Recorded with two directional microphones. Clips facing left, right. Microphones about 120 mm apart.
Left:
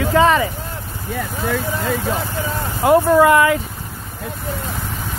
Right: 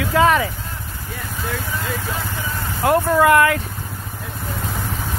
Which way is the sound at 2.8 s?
Centre (ahead or behind).